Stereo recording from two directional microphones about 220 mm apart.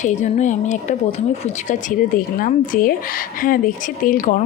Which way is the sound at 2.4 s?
40° left (ahead or behind).